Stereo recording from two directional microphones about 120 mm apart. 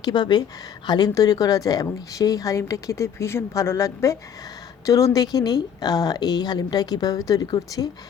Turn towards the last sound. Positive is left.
turn(degrees=35)  # may be behind; listen again after turning